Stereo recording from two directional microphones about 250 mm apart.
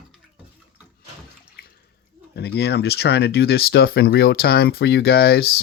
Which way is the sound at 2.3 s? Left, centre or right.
Left.